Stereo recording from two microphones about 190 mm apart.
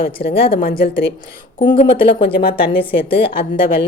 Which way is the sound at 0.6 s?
50° left (ahead or behind).